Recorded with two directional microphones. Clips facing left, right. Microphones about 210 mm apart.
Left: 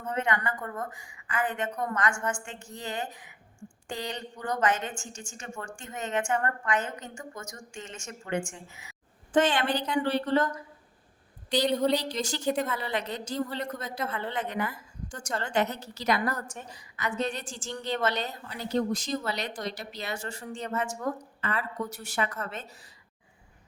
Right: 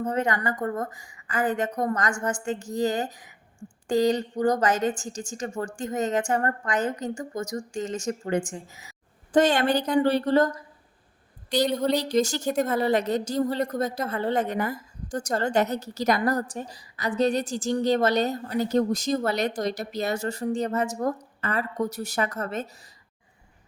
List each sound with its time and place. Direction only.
0.0 s a woman's voice: 40° right (ahead or behind)
11.7 s speech: centre (ahead or behind)
11.9 s a woman's voice: 45° right (ahead or behind)